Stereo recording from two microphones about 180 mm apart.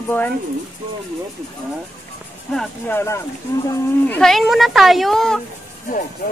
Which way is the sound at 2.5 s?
5° left (ahead or behind).